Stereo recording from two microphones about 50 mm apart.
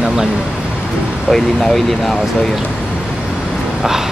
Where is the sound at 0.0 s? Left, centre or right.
Centre.